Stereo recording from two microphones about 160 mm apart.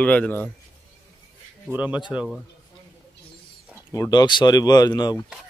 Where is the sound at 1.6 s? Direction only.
10° right (ahead or behind).